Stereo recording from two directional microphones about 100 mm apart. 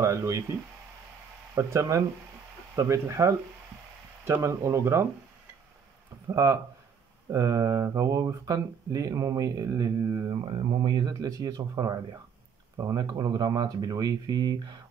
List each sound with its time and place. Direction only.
0.0 s speech: 30° right (ahead or behind)
6.3 s speech: 30° right (ahead or behind)
10.8 s speech: 45° right (ahead or behind)